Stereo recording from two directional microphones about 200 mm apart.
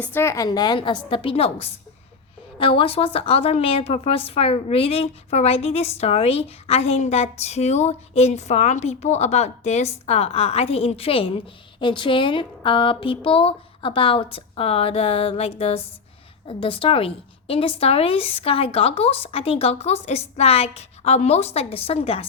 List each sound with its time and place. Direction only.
0.0 s a woman's voice: 10° left (ahead or behind); by 22.3 s 30° left (ahead or behind)